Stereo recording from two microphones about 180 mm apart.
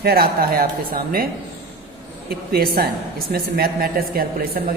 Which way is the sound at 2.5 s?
60° right (ahead or behind).